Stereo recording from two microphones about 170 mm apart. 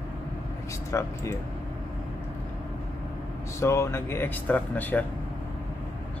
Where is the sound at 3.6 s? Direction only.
15° left (ahead or behind).